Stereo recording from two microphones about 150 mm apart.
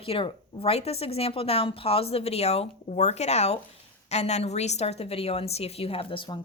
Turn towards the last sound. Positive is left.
turn(degrees=35)  # may be behind; listen again after turning